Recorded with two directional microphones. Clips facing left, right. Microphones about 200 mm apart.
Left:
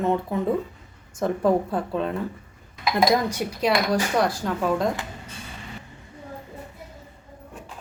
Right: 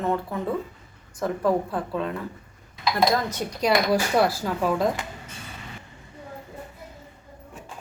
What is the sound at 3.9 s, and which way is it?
A woman's voice, 5° right (ahead or behind).